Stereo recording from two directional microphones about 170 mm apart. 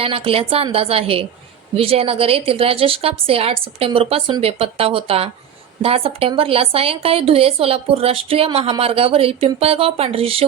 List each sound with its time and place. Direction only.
0.0 s a woman's voice: 35° right (ahead or behind)